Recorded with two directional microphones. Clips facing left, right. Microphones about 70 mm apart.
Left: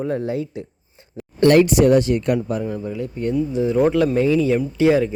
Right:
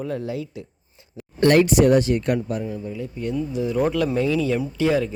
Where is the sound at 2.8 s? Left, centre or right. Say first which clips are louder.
Left 4 dB; left.